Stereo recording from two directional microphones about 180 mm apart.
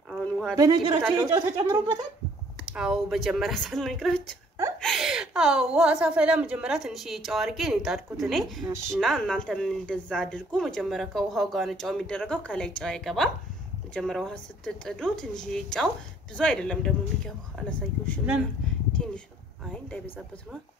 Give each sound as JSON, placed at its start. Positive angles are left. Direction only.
{"t": 0.1, "sound": "a sound", "side_deg": 0}
{"t": 0.6, "sound": "speech", "side_deg": -20}
{"t": 2.7, "sound": "speech", "side_deg": -5}